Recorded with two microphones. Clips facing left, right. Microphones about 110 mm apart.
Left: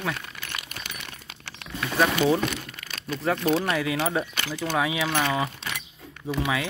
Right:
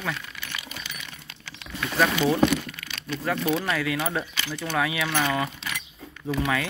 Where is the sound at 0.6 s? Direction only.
55° left (ahead or behind).